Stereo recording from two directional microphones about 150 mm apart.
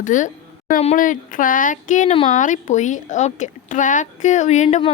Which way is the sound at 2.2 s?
55° left (ahead or behind).